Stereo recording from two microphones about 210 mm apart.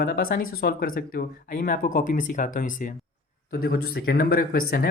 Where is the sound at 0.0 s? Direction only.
45° left (ahead or behind).